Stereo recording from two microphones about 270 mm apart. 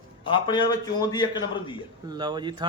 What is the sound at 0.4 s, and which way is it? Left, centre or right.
Speech, centre.